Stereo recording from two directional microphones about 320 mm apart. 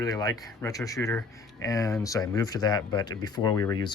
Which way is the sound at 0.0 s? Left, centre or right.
Centre.